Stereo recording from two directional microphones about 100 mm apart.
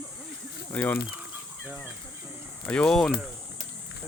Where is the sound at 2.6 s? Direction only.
10° left (ahead or behind).